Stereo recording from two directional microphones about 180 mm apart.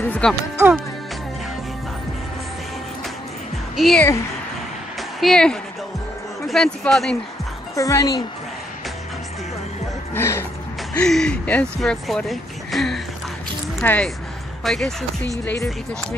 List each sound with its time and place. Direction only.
0.0 s speech: 5° left (ahead or behind)
3.7 s a woman's voice: centre (ahead or behind)
5.2 s speech: 5° left (ahead or behind)
7.7 s speech: 20° left (ahead or behind)
10.1 s music: 15° left (ahead or behind)
11.0 s speech: 5° left (ahead or behind)